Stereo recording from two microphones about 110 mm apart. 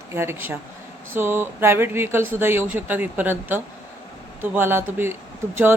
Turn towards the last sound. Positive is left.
turn(degrees=-20)  # may be behind; listen again after turning